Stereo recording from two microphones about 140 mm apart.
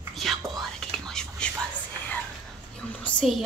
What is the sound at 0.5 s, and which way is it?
Whispering, 5° left (ahead or behind).